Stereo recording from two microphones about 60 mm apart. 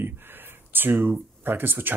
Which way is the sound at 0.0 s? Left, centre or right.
Right.